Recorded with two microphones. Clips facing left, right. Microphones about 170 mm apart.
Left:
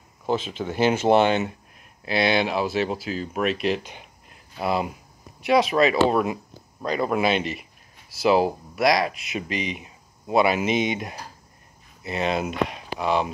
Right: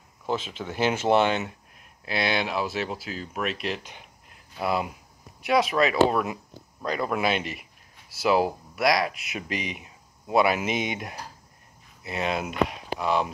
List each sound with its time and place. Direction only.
0.7 s speech: centre (ahead or behind)
4.6 s speech: 25° left (ahead or behind)
6.2 s speech: 15° left (ahead or behind)
8.7 s speech: 5° right (ahead or behind)
9.3 s speech: 25° left (ahead or behind)
12.0 s speech: 5° right (ahead or behind)